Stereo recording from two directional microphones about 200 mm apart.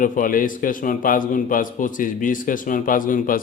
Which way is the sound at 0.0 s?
45° left (ahead or behind).